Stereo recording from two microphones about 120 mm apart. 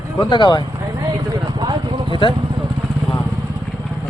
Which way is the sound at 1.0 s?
35° right (ahead or behind).